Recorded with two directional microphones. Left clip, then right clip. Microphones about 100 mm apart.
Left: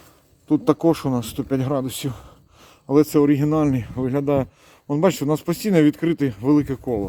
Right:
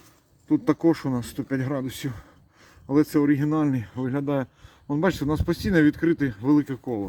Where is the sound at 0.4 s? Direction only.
20° left (ahead or behind).